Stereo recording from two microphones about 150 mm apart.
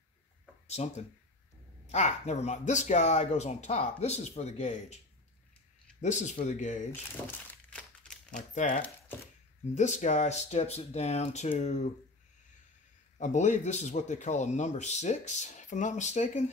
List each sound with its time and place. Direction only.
0.7 s speech: 45° left (ahead or behind)
6.9 s crumpling: 10° left (ahead or behind)
8.3 s speech: 55° left (ahead or behind)
13.2 s speech: 55° left (ahead or behind)